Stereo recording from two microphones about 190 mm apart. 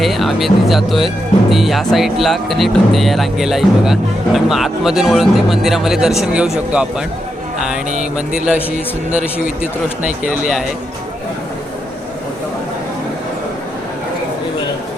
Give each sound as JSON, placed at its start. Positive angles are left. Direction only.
{"t": 0.0, "sound": "speech", "side_deg": 0}
{"t": 7.9, "sound": "speech", "side_deg": -40}